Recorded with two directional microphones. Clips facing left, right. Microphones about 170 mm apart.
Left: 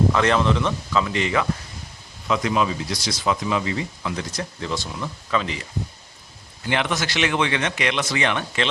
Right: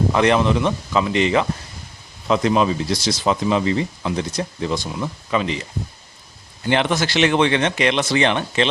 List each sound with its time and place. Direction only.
0.1 s speech: 20° right (ahead or behind)
2.2 s speech: 35° right (ahead or behind)
6.7 s speech: 30° right (ahead or behind)